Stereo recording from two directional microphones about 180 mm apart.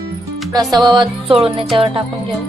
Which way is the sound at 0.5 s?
25° right (ahead or behind).